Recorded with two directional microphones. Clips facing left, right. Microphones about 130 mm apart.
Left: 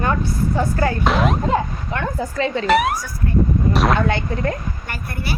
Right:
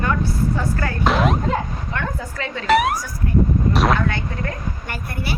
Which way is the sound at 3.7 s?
Centre (ahead or behind).